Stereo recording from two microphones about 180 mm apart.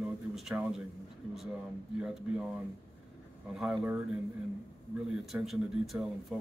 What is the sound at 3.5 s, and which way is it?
Speech, 5° right (ahead or behind).